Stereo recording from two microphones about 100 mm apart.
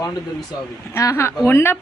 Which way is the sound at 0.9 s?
30° left (ahead or behind).